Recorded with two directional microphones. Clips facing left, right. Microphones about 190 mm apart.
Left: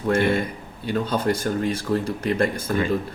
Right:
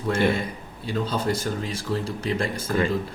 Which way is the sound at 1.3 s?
55° left (ahead or behind).